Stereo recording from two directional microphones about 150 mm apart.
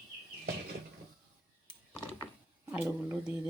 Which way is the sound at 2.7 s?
10° right (ahead or behind).